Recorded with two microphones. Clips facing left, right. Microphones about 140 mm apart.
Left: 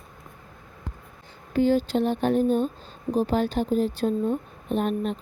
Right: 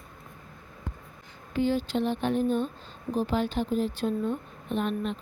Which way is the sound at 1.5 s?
40° left (ahead or behind).